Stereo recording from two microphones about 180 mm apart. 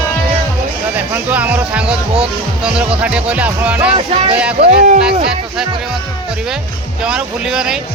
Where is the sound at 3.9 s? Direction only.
30° right (ahead or behind).